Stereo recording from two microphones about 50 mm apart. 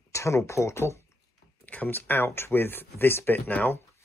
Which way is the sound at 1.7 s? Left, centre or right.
Left.